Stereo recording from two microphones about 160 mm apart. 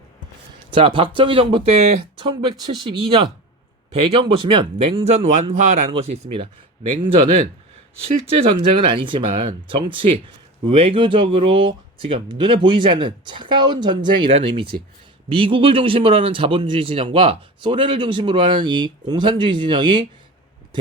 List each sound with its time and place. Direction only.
0.7 s speech: 30° right (ahead or behind)
4.2 s speech: 35° right (ahead or behind)
5.0 s speech: 45° right (ahead or behind); by 20.1 s 30° right (ahead or behind)